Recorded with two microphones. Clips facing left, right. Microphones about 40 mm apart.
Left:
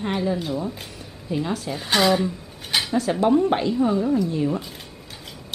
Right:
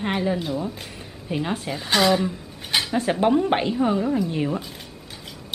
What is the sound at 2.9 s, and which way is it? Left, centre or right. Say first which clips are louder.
A woman's voice: left 1 dB; right.